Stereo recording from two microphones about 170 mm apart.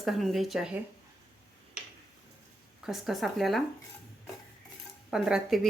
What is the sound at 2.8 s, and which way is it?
Speech, centre (ahead or behind).